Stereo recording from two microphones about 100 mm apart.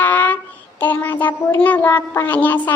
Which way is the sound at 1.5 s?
15° left (ahead or behind).